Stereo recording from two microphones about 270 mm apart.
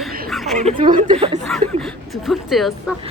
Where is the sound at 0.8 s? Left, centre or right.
Right.